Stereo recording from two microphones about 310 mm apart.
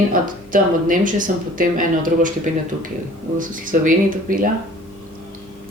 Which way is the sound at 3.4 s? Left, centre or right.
Right.